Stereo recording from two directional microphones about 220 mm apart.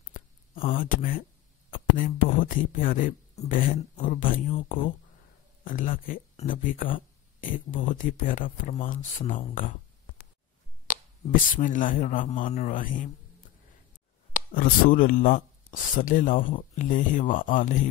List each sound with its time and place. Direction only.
0.1 s a sound: 40° left (ahead or behind)
1.7 s speech: 40° left (ahead or behind)
11.5 s speech: 35° left (ahead or behind)
14.3 s speech: 40° left (ahead or behind)